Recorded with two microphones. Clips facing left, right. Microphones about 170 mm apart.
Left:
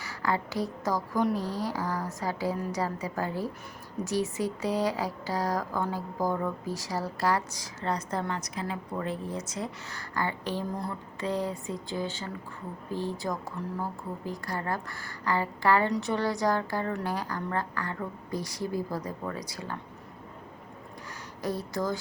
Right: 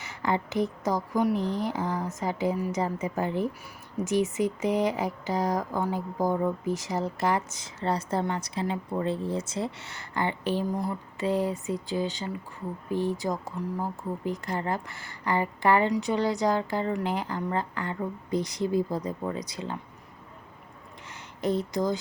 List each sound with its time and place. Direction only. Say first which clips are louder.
0.0 s speech: right 2 dB; 20° right (ahead or behind)
21.4 s speech: right 4 dB; 20° right (ahead or behind)